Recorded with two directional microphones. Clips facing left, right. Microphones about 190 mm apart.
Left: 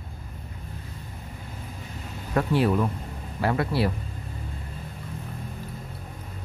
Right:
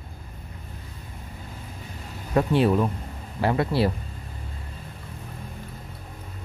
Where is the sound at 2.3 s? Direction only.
20° right (ahead or behind).